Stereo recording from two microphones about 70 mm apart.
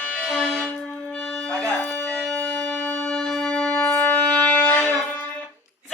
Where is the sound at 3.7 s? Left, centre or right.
Left.